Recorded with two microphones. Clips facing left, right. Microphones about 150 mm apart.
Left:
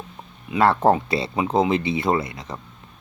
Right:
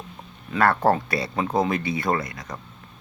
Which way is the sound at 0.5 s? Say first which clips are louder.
Left 2 dB; 25° left (ahead or behind).